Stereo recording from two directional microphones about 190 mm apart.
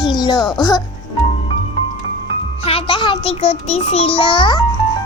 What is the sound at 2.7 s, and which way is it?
Child singing, 30° left (ahead or behind).